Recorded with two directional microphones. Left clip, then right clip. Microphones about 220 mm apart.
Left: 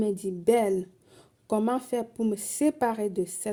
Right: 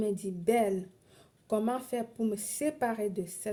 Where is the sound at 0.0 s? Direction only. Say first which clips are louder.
Left 5 dB; 40° left (ahead or behind).